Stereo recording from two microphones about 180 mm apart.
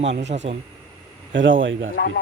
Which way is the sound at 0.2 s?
40° right (ahead or behind).